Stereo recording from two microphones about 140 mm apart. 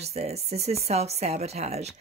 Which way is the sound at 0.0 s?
50° right (ahead or behind).